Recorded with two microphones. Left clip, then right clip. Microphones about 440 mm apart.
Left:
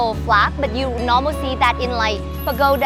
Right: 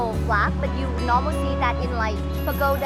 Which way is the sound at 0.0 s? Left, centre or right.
Left.